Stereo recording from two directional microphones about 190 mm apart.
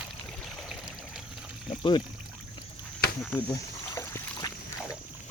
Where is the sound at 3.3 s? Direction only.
10° left (ahead or behind).